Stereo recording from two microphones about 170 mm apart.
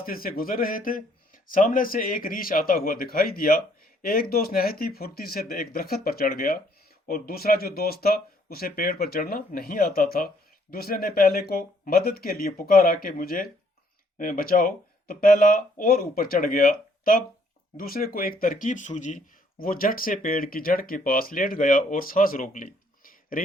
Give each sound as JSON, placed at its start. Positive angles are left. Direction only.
{"t": 0.0, "sound": "speech", "side_deg": 60}